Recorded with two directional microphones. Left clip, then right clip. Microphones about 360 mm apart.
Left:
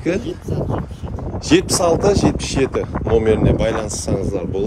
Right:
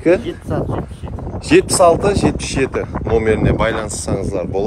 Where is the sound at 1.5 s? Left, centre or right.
Right.